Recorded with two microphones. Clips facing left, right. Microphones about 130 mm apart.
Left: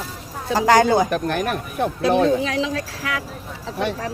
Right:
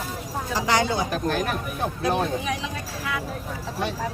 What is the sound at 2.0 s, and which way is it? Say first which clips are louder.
Speech: left 8 dB; 85° left.